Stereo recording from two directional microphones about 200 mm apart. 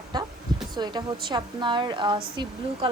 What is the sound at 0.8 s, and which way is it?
A woman's voice, 20° right (ahead or behind).